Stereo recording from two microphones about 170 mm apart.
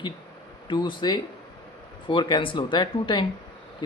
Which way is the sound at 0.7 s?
25° left (ahead or behind).